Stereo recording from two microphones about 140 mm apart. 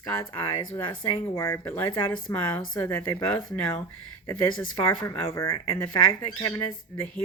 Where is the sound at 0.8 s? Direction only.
25° left (ahead or behind).